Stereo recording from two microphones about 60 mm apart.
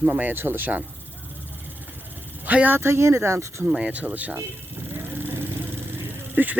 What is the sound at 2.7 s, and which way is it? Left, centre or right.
Speech, right.